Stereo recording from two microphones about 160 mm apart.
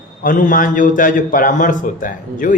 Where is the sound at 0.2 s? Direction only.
60° left (ahead or behind).